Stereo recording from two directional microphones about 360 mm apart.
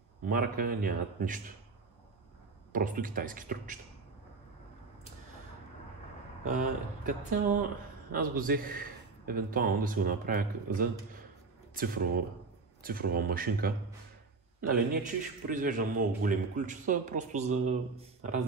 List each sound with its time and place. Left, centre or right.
0.2 s a man's voice: right
2.7 s a man's voice: right
6.4 s a man's voice: right